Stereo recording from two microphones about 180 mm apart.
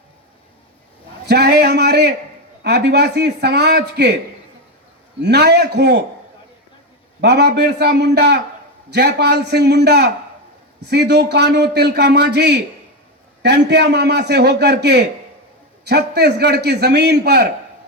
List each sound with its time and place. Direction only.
1.3 s a man's voice: 65° right (ahead or behind)
5.2 s a man's voice: 65° right (ahead or behind)
7.2 s a man's voice: 65° right (ahead or behind)